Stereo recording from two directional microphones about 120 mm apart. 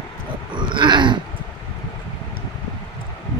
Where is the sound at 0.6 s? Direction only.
40° right (ahead or behind).